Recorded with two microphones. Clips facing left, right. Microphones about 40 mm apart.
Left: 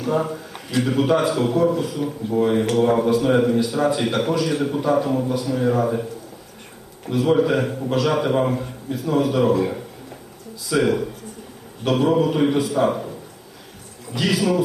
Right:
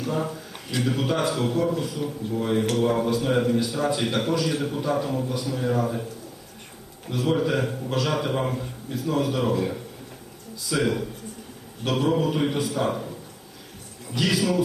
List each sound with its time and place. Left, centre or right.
0.1 s a man's voice: centre
7.1 s a man's voice: centre
14.3 s a man's voice: centre